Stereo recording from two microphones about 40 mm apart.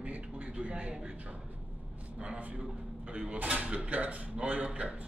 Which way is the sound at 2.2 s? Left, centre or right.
Right.